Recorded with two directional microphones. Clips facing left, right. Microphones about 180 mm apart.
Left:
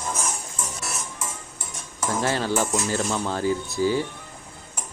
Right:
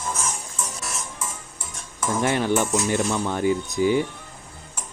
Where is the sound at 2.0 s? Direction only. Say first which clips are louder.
Right 2 dB; 20° right (ahead or behind).